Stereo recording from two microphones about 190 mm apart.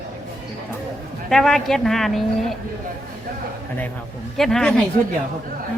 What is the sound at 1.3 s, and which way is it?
Speech, 5° left (ahead or behind).